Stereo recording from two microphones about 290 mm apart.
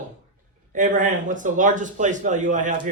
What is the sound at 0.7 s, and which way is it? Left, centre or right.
Speech, right.